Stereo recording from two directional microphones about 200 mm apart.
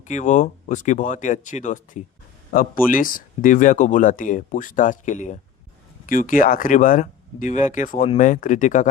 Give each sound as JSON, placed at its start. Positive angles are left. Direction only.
{"t": 0.1, "sound": "speech", "side_deg": 35}